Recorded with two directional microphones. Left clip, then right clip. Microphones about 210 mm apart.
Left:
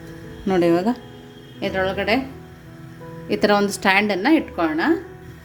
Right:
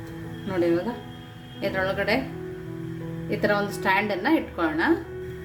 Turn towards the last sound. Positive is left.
turn(degrees=25)  # may be behind; listen again after turning